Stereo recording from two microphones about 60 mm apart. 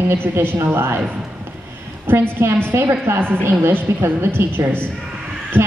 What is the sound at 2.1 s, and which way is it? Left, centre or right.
A woman's voice, right.